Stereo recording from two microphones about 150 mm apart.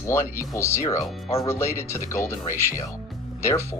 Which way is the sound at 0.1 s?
20° left (ahead or behind).